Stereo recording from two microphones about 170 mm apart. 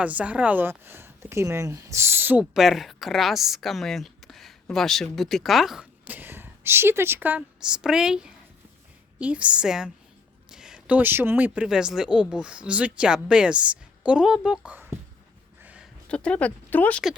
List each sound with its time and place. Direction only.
0.0 s a woman's voice: 10° right (ahead or behind)
15.6 s a sound: 5° right (ahead or behind)
16.0 s speech: 5° left (ahead or behind)